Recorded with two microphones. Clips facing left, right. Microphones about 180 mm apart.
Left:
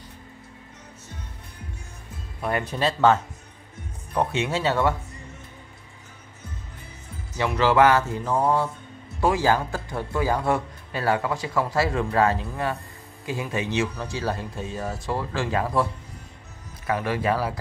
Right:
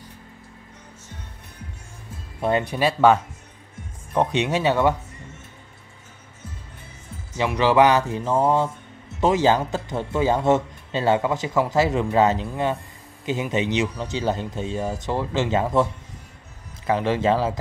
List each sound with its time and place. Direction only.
2.6 s speech: 10° right (ahead or behind)
7.3 s speech: 15° right (ahead or behind)